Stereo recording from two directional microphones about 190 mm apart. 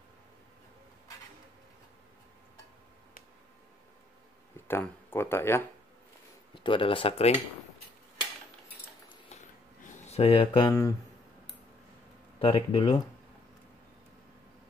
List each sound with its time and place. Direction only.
4.6 s speech: 10° left (ahead or behind)
6.5 s speech: 25° left (ahead or behind)
9.8 s a sound: 35° left (ahead or behind)
10.7 s speech: 15° left (ahead or behind)
12.4 s speech: 30° left (ahead or behind)